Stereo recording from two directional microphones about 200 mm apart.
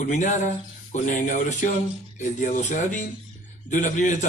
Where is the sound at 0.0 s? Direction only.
40° left (ahead or behind).